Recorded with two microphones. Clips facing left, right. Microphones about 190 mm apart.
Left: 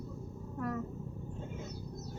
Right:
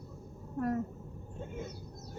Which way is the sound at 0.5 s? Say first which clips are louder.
Right 5 dB; 40° right (ahead or behind).